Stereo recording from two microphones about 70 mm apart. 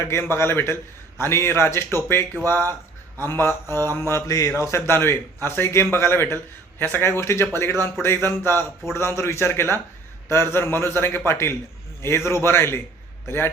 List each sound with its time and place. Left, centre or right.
0.0 s speech: left